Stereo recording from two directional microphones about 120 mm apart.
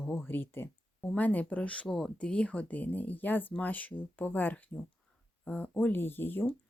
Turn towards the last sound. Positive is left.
turn(degrees=15)  # may be behind; listen again after turning